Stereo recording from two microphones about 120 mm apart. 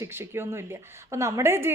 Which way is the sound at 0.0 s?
20° right (ahead or behind).